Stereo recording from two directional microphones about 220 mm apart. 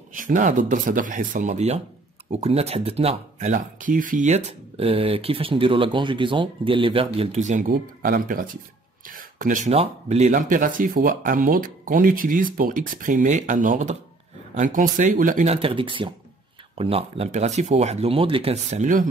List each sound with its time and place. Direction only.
0.1 s speech: 35° right (ahead or behind)